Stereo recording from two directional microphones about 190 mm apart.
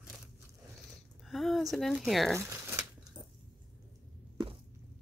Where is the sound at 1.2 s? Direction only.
Centre (ahead or behind).